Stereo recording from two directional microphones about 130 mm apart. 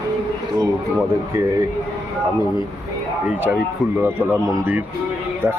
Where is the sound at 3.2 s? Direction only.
15° right (ahead or behind).